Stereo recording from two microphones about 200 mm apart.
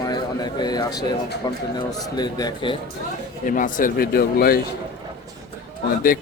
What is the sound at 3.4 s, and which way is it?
A man's voice, 40° left (ahead or behind).